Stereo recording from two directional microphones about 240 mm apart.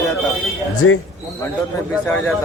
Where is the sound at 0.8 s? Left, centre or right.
Left.